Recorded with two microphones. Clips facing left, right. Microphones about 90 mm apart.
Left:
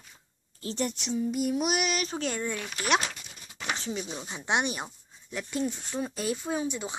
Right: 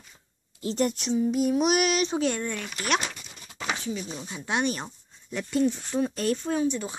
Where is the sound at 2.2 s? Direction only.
5° left (ahead or behind).